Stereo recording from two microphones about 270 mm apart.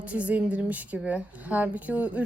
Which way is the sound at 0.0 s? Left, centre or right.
Centre.